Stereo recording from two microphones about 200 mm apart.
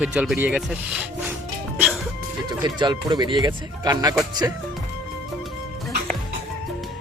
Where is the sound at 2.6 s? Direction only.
20° right (ahead or behind).